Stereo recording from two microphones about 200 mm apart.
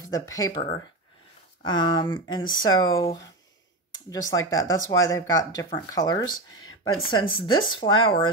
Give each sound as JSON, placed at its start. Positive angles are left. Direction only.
{"t": 0.1, "sound": "speech", "side_deg": 15}
{"t": 1.6, "sound": "speech", "side_deg": 20}
{"t": 4.1, "sound": "speech", "side_deg": 15}